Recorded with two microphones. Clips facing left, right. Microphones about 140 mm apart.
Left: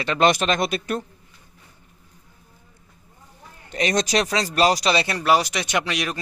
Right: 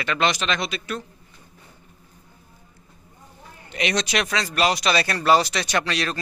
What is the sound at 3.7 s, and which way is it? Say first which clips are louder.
A man's voice: left 3 dB; 40° left (ahead or behind).